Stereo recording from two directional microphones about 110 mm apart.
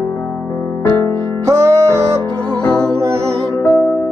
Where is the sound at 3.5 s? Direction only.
25° left (ahead or behind).